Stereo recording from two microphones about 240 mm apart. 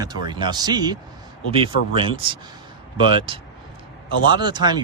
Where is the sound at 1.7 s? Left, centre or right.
Left.